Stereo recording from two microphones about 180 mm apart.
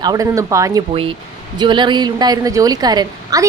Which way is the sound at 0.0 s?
20° right (ahead or behind).